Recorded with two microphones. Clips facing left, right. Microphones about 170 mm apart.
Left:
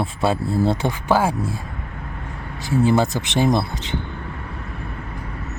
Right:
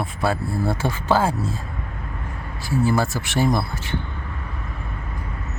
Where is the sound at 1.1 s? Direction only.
10° left (ahead or behind).